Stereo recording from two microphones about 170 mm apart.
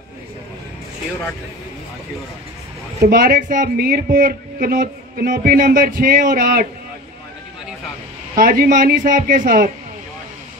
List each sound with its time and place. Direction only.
3.1 s a man's voice: 60° right (ahead or behind)
8.4 s speech: 55° right (ahead or behind)